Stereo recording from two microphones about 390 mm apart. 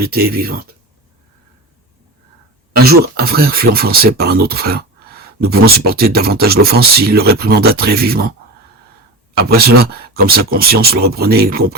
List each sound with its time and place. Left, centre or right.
0.0 s speech: right
2.7 s speech: right
9.4 s speech: right